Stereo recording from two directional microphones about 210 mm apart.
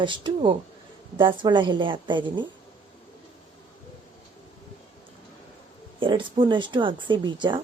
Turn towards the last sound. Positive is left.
turn(degrees=-20)  # may be behind; listen again after turning